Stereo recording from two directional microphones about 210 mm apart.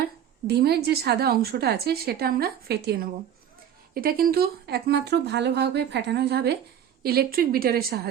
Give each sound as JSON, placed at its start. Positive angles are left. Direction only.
{"t": 0.4, "sound": "speech", "side_deg": -50}